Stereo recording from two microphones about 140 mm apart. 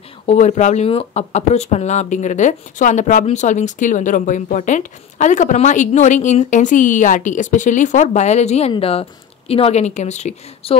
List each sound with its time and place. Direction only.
0.3 s speech: 55° left (ahead or behind)